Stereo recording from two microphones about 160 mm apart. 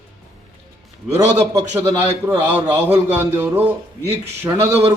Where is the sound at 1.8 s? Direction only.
10° right (ahead or behind).